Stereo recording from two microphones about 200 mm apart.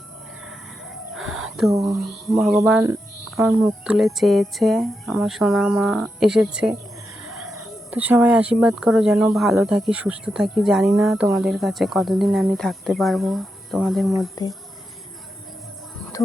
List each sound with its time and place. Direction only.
1.5 s speech: centre (ahead or behind)
7.2 s a sound: 5° right (ahead or behind)
7.5 s speech: 10° right (ahead or behind)
14.4 s speech: 15° left (ahead or behind)